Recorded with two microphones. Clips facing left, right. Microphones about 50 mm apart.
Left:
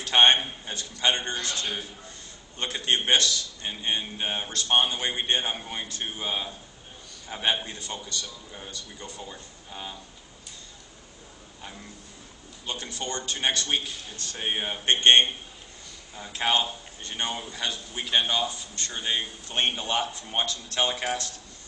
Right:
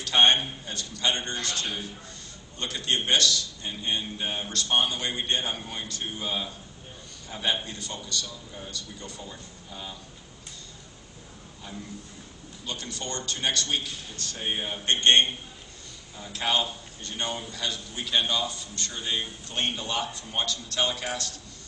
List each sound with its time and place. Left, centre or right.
0.0 s a man's voice: left
12.6 s a man's voice: left